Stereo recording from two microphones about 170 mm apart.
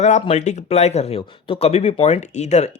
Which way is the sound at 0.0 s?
40° left (ahead or behind).